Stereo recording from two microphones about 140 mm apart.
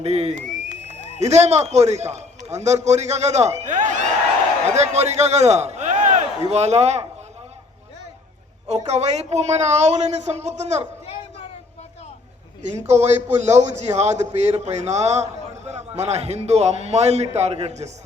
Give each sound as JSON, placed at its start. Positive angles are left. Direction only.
{"t": 0.0, "sound": "a man's voice", "side_deg": -50}
{"t": 8.6, "sound": "a man's voice", "side_deg": -50}
{"t": 12.9, "sound": "a man's voice", "side_deg": -55}